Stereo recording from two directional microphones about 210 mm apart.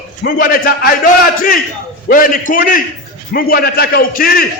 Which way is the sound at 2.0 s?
40° left (ahead or behind).